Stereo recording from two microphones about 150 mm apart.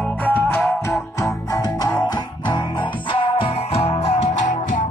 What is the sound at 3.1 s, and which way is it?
Music, 40° left (ahead or behind).